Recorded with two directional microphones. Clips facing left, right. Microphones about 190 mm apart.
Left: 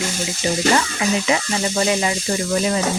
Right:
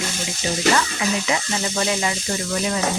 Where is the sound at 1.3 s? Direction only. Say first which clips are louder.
Left 3 dB; 25° left (ahead or behind).